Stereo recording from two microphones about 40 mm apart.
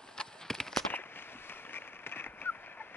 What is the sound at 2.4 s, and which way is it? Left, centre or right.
Fowl, left.